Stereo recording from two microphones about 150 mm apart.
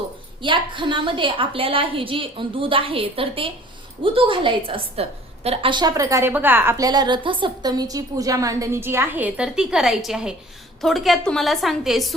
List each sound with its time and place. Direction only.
0.4 s a woman's voice: 35° right (ahead or behind); by 12.1 s centre (ahead or behind)